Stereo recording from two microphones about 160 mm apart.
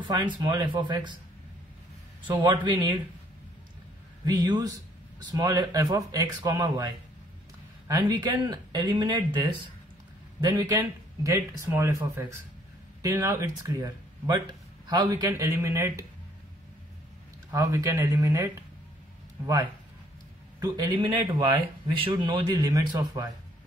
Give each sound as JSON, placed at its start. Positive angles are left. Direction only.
{"t": 0.0, "sound": "speech", "side_deg": -30}
{"t": 2.4, "sound": "speech", "side_deg": -30}
{"t": 4.3, "sound": "speech", "side_deg": -25}
{"t": 7.9, "sound": "speech", "side_deg": -25}
{"t": 17.5, "sound": "speech", "side_deg": -20}
{"t": 20.6, "sound": "speech", "side_deg": -25}